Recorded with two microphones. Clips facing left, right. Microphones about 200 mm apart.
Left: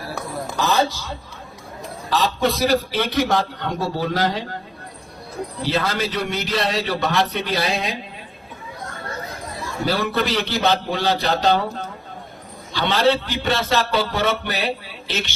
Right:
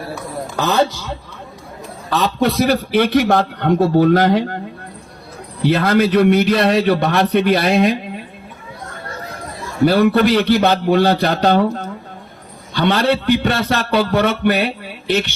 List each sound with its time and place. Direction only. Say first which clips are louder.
2.0 s a man's voice: right 3 dB; 60° right (ahead or behind)
5.7 s a man's voice: right 10 dB; 55° right (ahead or behind)
9.8 s a man's voice: right 10 dB; 60° right (ahead or behind)
12.7 s a man's voice: right 3 dB; 55° right (ahead or behind)